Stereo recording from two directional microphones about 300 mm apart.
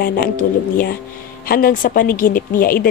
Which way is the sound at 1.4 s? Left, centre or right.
Left.